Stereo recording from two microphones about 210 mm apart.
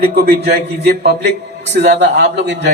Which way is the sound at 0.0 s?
50° right (ahead or behind).